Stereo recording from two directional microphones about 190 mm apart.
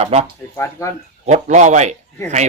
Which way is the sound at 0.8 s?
15° left (ahead or behind).